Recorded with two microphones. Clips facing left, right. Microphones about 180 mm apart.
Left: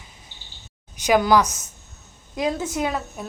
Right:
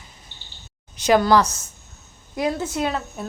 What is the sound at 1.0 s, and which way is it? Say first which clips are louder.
A child's voice: right 1 dB; 15° left (ahead or behind).